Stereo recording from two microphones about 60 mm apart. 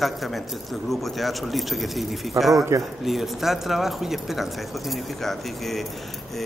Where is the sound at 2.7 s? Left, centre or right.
Right.